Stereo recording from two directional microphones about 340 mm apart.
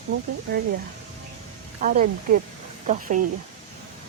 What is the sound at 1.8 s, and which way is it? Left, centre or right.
Speech, right.